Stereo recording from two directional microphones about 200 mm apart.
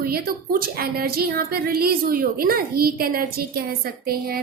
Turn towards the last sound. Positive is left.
turn(degrees=-50)  # may be behind; listen again after turning